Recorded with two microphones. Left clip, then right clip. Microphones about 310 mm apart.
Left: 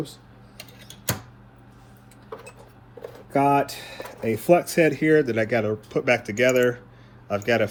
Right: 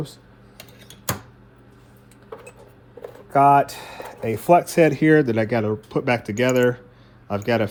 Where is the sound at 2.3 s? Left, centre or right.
Centre.